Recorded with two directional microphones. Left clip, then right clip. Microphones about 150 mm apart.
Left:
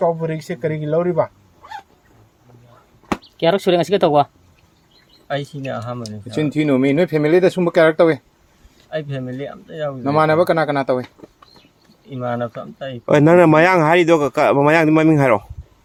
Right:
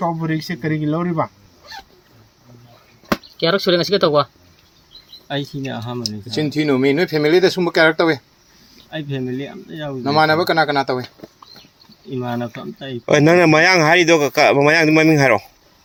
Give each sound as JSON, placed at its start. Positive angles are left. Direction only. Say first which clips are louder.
{"t": 0.0, "sound": "speech", "louder": "left 3 dB", "side_deg": 70}
{"t": 3.4, "sound": "speech", "louder": "left 1 dB", "side_deg": 70}
{"t": 5.6, "sound": "speech", "louder": "left 2 dB", "side_deg": 30}
{"t": 6.0, "sound": "speech", "louder": "right 1 dB", "side_deg": 45}
{"t": 8.9, "sound": "speech", "louder": "even", "side_deg": 30}
{"t": 10.0, "sound": "speech", "louder": "even", "side_deg": 45}
{"t": 12.2, "sound": "speech", "louder": "left 4 dB", "side_deg": 30}